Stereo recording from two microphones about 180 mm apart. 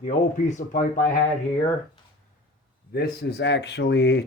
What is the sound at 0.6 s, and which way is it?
Speech, 45° left (ahead or behind).